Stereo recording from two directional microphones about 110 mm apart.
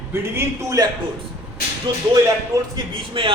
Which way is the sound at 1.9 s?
45° right (ahead or behind).